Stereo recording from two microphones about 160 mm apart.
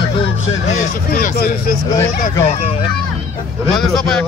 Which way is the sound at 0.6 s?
60° left (ahead or behind).